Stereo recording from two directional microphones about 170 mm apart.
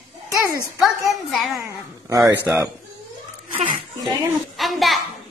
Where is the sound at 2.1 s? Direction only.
15° right (ahead or behind).